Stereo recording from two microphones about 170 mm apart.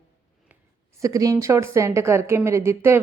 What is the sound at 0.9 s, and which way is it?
Speech, 20° right (ahead or behind).